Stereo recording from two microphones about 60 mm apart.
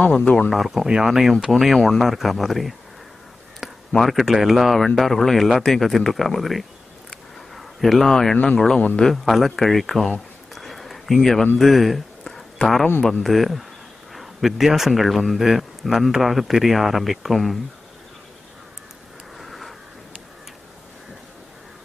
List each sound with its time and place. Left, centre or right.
0.0 s speech: centre
0.5 s a man's voice: centre
3.9 s a man's voice: centre
9.1 s a man's voice: centre
10.5 s a sound: centre
13.2 s a man's voice: centre
19.3 s a sound: centre